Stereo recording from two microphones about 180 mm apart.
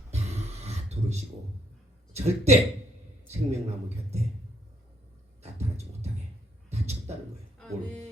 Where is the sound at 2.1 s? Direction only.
35° right (ahead or behind).